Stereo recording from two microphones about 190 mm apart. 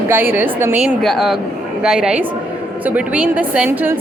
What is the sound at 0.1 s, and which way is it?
A woman's voice, 10° right (ahead or behind).